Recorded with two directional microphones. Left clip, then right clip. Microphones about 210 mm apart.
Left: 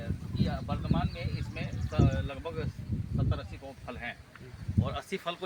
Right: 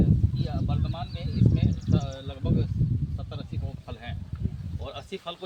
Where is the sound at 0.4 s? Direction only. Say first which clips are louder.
Right 1 dB; 5° left (ahead or behind).